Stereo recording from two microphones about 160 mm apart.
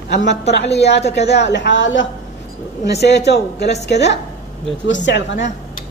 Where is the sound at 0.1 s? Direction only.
90° left.